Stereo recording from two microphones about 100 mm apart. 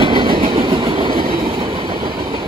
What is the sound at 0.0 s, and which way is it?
Train, 50° right (ahead or behind).